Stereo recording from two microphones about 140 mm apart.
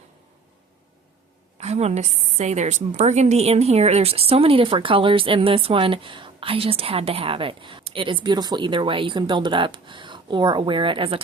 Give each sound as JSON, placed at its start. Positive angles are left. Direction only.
{"t": 1.5, "sound": "a woman's voice", "side_deg": -50}